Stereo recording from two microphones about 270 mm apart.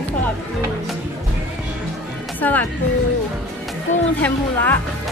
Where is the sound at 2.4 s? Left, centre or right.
Centre.